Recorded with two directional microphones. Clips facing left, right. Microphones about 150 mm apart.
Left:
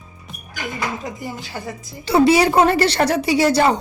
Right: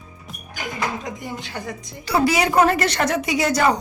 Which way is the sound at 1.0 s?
5° left (ahead or behind).